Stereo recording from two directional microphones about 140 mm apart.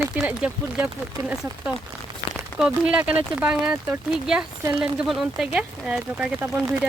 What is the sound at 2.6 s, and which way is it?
Speech, 5° right (ahead or behind).